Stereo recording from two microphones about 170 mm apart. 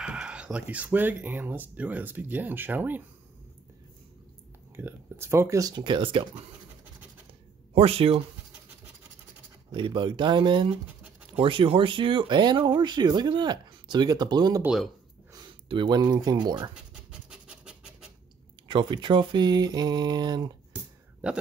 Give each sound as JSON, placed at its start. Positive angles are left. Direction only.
{"t": 0.0, "sound": "speech", "side_deg": -5}
{"t": 4.7, "sound": "speech", "side_deg": -15}
{"t": 7.7, "sound": "speech", "side_deg": -35}
{"t": 9.7, "sound": "speech", "side_deg": -30}
{"t": 14.6, "sound": "speech", "side_deg": -5}
{"t": 15.3, "sound": "speech", "side_deg": -30}
{"t": 16.9, "sound": "a sound", "side_deg": -5}
{"t": 18.7, "sound": "speech", "side_deg": -25}
{"t": 21.2, "sound": "speech", "side_deg": -5}